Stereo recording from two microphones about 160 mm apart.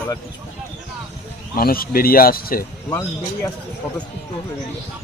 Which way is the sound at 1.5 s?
65° left (ahead or behind).